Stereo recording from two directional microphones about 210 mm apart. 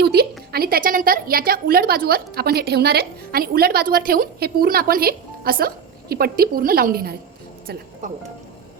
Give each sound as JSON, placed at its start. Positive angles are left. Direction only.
{"t": 0.0, "sound": "a woman's voice", "side_deg": -50}